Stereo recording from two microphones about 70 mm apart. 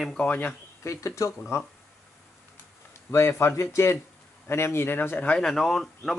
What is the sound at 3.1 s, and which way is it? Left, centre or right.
Speech, left.